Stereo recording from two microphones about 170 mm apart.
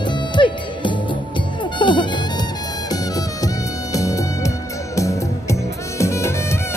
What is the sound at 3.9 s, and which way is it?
Music, 20° left (ahead or behind).